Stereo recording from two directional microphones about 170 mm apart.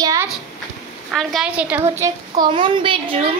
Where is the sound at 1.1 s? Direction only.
Centre (ahead or behind); by 2.5 s 15° right (ahead or behind).